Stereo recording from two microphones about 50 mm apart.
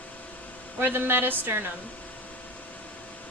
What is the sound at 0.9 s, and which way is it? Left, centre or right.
Speech, right.